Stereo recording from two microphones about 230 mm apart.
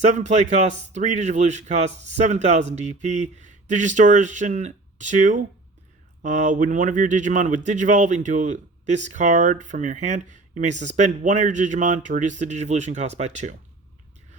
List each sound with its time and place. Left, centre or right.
0.0 s speech: right